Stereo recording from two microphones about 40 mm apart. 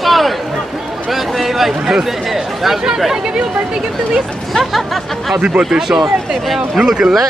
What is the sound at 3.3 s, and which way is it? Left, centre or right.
Speech, right.